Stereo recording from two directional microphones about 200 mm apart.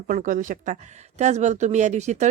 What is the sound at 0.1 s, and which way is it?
Speech, 40° right (ahead or behind).